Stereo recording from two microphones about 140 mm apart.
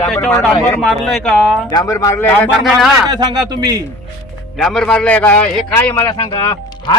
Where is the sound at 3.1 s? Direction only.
30° right (ahead or behind).